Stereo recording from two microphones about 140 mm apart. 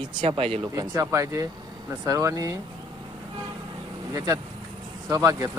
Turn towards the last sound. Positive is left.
turn(degrees=-25)  # may be behind; listen again after turning